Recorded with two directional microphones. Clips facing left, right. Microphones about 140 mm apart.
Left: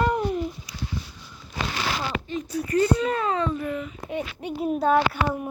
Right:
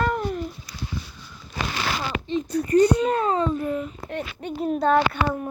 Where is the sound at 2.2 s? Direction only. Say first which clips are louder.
Right 4 dB; 30° right (ahead or behind).